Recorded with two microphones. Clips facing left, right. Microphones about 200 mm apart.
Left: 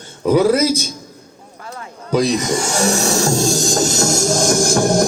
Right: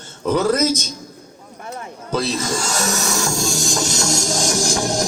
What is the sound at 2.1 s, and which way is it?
Speech, 15° left (ahead or behind).